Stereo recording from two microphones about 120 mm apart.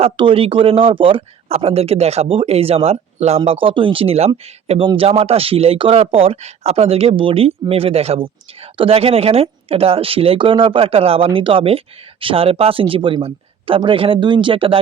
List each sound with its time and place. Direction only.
0.0 s speech: 50° right (ahead or behind)